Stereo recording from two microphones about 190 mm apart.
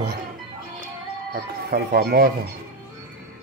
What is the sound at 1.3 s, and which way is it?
Speech, 50° right (ahead or behind).